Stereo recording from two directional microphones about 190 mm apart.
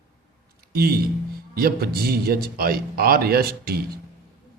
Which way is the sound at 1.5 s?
55° right (ahead or behind).